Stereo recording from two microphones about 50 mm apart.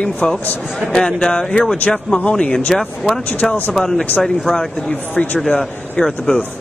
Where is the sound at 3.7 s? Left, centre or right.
Centre.